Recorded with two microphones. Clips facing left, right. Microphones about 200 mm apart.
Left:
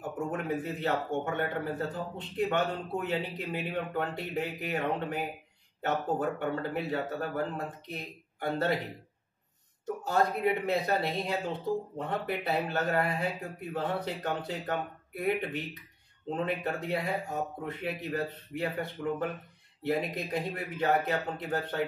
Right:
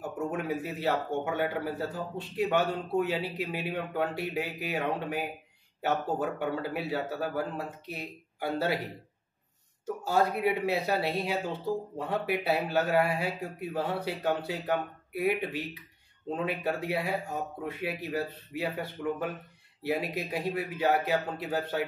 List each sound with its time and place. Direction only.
0.3 s a man's voice: 10° right (ahead or behind)
10.0 s a man's voice: 10° right (ahead or behind)